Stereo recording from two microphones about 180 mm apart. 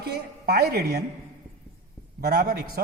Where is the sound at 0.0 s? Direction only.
60° right (ahead or behind).